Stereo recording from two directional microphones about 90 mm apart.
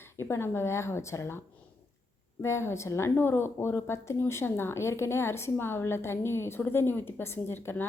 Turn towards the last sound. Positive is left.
turn(degrees=25)  # may be behind; listen again after turning